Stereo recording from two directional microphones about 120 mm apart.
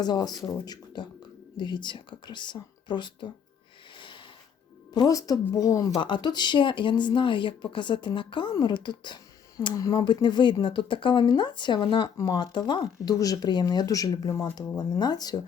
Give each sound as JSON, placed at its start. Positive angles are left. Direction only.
{"t": 0.0, "sound": "speech", "side_deg": 35}
{"t": 3.9, "sound": "a sound", "side_deg": 45}
{"t": 4.9, "sound": "a woman's voice", "side_deg": 30}
{"t": 6.0, "sound": "speech", "side_deg": 40}
{"t": 14.3, "sound": "a woman's voice", "side_deg": 20}
{"t": 14.8, "sound": "speech", "side_deg": 35}